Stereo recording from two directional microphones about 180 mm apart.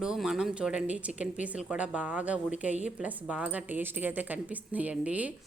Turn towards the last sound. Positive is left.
turn(degrees=-10)  # may be behind; listen again after turning